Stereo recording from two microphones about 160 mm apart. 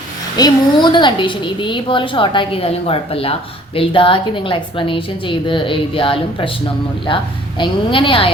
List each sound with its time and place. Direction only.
0.3 s a woman's voice: 25° left (ahead or behind)